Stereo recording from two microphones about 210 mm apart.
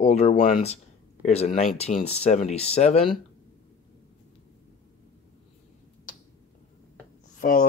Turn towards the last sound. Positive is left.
turn(degrees=40)  # may be behind; listen again after turning